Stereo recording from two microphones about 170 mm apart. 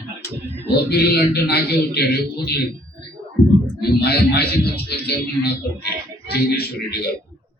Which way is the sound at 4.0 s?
70° left (ahead or behind).